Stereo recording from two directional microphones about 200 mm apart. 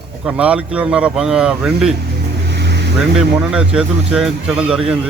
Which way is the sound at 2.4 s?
60° right (ahead or behind).